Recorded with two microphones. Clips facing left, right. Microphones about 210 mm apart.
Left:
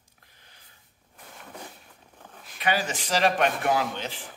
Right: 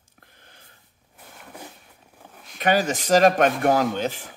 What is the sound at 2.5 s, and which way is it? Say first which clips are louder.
Speech: right 6 dB; 40° right (ahead or behind).